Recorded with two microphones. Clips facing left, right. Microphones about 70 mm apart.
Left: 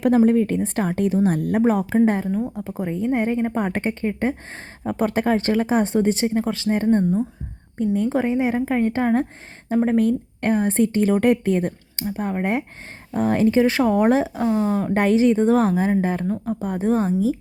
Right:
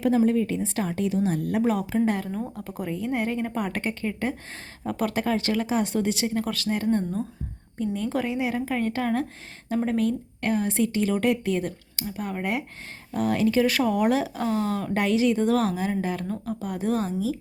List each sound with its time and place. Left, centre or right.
0.3 s a woman's voice: left
2.3 s speech: centre
2.6 s a woman's voice: left
14.3 s a woman's voice: centre
14.9 s a woman's voice: left
16.2 s a woman's voice: centre
16.6 s a woman's voice: left